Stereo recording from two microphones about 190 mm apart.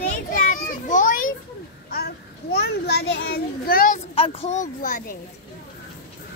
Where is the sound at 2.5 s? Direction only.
60° left (ahead or behind).